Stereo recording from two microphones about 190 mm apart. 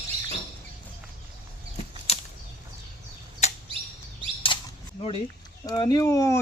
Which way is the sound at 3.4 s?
35° left (ahead or behind).